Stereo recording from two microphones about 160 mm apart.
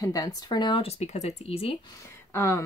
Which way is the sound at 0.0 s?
20° left (ahead or behind).